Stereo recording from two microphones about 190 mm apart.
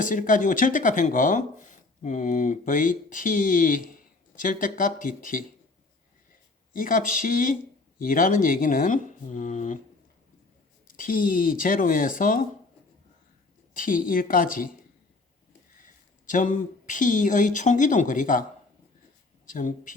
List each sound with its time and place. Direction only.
0.0 s speech: 45° left (ahead or behind)
6.7 s speech: 45° left (ahead or behind)
10.9 s speech: 45° left (ahead or behind)
13.7 s speech: 45° left (ahead or behind)
15.8 s speech: 45° left (ahead or behind)
19.5 s speech: 45° left (ahead or behind)